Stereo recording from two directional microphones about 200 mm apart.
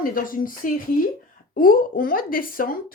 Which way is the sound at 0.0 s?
45° left (ahead or behind).